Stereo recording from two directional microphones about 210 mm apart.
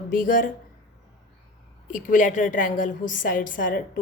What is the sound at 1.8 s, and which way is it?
A woman's voice, 40° left (ahead or behind).